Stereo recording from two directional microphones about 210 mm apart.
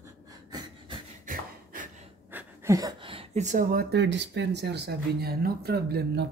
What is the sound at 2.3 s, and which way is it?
Speech, 15° right (ahead or behind).